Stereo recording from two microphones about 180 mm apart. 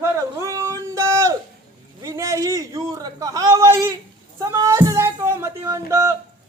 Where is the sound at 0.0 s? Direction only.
15° right (ahead or behind).